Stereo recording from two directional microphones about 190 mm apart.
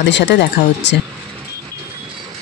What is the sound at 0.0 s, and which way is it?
Speech, 65° left (ahead or behind).